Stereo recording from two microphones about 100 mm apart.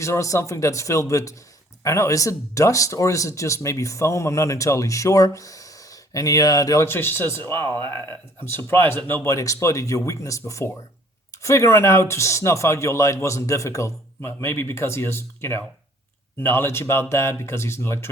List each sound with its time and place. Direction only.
0.0 s speech: 30° left (ahead or behind)
6.9 s speech: 20° left (ahead or behind)